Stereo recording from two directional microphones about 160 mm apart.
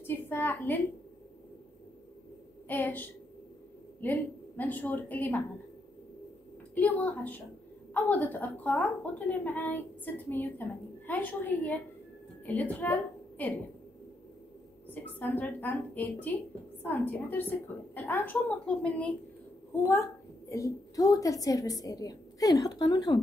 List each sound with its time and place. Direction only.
0.0 s a woman's voice: 10° left (ahead or behind)
2.7 s a woman's voice: 10° left (ahead or behind)
6.7 s a woman's voice: 10° left (ahead or behind)
15.1 s a woman's voice: 10° left (ahead or behind)
19.9 s a woman's voice: 20° left (ahead or behind)